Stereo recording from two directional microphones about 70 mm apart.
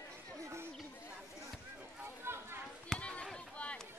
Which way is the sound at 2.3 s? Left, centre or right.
Right.